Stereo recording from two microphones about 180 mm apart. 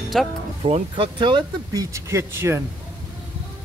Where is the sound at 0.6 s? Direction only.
30° right (ahead or behind); by 2.6 s 15° right (ahead or behind).